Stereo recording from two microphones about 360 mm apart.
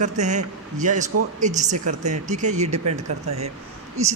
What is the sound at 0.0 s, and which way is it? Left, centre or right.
A man's voice, centre.